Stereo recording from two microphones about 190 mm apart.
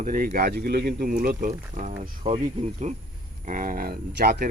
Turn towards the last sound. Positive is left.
turn(degrees=-50)  # may be behind; listen again after turning